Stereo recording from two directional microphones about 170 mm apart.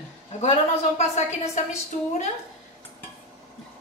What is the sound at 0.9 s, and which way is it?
Speech, 40° left (ahead or behind).